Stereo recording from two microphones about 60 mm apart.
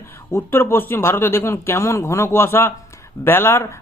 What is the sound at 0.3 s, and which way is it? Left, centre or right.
Speech, left.